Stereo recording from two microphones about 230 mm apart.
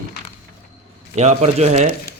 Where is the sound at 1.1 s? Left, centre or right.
Right.